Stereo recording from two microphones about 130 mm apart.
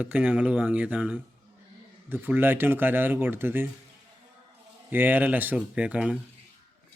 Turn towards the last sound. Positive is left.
turn(degrees=-10)  # may be behind; listen again after turning